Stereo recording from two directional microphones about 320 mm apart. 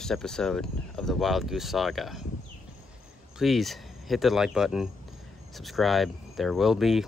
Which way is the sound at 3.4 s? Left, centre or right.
Centre.